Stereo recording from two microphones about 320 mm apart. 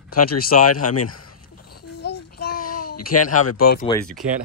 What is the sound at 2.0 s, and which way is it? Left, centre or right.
Babbling, left.